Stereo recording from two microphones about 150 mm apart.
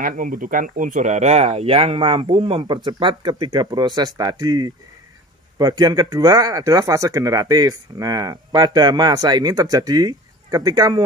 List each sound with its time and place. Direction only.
0.0 s speech: 65° right (ahead or behind); by 11.0 s 25° right (ahead or behind)